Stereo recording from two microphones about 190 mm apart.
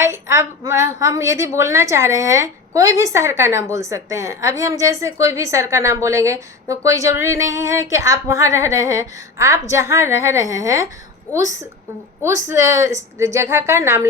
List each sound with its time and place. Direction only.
0.0 s a woman's voice: 15° right (ahead or behind)
12.2 s a woman's voice: 15° right (ahead or behind)